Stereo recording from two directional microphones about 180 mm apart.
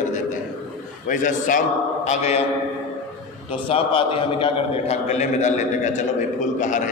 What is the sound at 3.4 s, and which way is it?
A man's voice, 30° left (ahead or behind).